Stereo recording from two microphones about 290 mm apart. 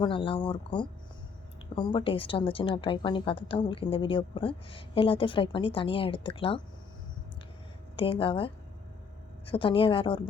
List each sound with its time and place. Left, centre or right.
0.0 s a woman's voice: centre
7.9 s a woman's voice: centre